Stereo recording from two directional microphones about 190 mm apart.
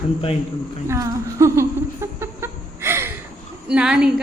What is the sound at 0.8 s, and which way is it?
Speech, 15° right (ahead or behind).